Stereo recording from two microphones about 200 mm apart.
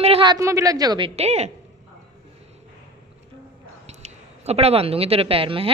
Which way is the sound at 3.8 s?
30° right (ahead or behind).